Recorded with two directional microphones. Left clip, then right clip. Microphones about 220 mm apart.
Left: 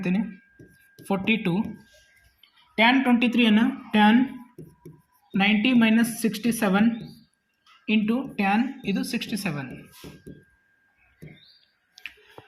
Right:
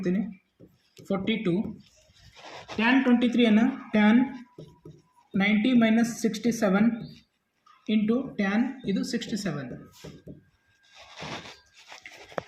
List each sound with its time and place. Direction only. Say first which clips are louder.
1.0 s speech: left 3 dB; 35° left (ahead or behind)
2.7 s speech: left 4 dB; 40° left (ahead or behind)
5.4 s speech: left 3 dB; 35° left (ahead or behind)
7.9 s speech: left 2 dB; 40° left (ahead or behind)